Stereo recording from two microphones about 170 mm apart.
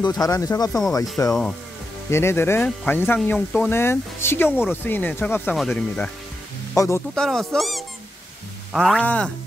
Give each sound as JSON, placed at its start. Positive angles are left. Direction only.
{"t": 0.0, "sound": "speech", "side_deg": 25}
{"t": 4.5, "sound": "speech", "side_deg": -5}
{"t": 4.8, "sound": "speech", "side_deg": 10}
{"t": 6.7, "sound": "speech", "side_deg": 20}
{"t": 7.2, "sound": "speech", "side_deg": 0}